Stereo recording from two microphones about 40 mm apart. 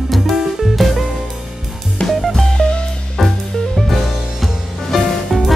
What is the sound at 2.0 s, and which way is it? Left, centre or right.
Music, centre.